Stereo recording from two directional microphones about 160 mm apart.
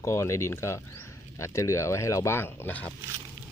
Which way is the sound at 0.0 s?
20° left (ahead or behind).